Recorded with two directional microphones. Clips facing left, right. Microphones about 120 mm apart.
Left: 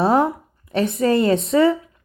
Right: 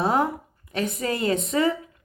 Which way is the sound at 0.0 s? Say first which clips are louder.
Left 5 dB; 35° left (ahead or behind).